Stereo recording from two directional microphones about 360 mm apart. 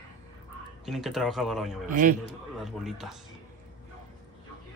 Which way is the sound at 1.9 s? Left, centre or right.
Right.